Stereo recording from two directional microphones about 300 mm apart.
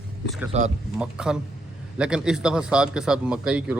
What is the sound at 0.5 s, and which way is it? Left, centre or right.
Speech, right.